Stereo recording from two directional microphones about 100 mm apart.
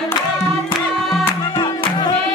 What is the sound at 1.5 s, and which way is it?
Music, 50° left (ahead or behind).